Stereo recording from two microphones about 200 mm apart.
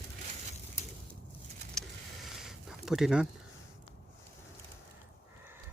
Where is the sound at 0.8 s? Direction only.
35° left (ahead or behind).